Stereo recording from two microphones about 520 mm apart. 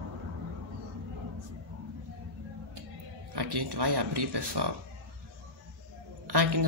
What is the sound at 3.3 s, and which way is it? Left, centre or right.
Speech, right.